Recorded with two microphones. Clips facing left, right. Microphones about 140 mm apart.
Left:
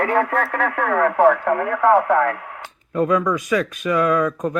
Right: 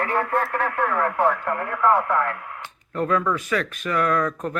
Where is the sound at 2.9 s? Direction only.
10° left (ahead or behind).